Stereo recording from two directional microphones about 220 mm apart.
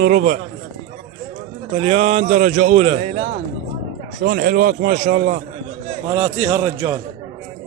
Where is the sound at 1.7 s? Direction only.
25° right (ahead or behind).